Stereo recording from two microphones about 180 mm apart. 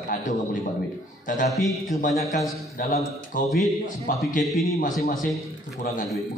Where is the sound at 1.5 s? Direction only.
Centre (ahead or behind).